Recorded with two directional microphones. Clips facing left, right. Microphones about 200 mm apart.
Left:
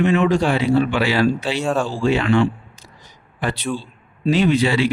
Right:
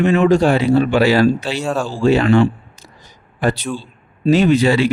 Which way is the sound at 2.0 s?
40° right (ahead or behind).